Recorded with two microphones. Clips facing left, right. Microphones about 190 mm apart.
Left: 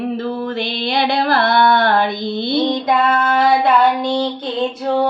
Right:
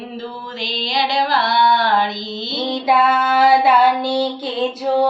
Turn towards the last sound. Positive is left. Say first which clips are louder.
# even
turn(degrees=-5)  # may be behind; listen again after turning